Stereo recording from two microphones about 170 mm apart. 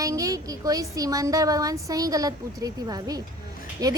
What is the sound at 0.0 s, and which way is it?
A woman's voice, 20° right (ahead or behind).